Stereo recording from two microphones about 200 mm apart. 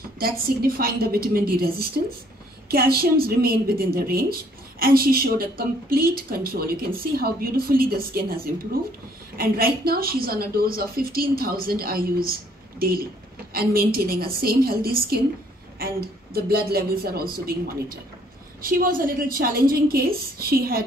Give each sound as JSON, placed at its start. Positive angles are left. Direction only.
{"t": 0.2, "sound": "a woman's voice", "side_deg": -45}
{"t": 9.4, "sound": "a woman's voice", "side_deg": -50}